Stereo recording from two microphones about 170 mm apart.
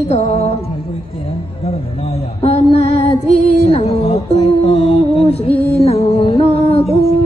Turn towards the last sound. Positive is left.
turn(degrees=35)  # may be behind; listen again after turning